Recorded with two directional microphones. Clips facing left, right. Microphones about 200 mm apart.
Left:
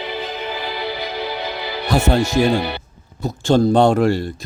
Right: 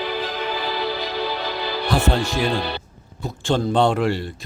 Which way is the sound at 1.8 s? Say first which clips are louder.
Left 4 dB; 45° left (ahead or behind).